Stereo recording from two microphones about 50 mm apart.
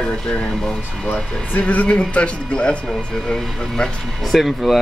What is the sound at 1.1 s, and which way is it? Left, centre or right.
Speech, left.